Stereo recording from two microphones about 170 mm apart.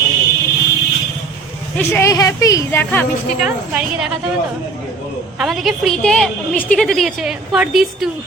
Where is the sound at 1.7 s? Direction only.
15° left (ahead or behind).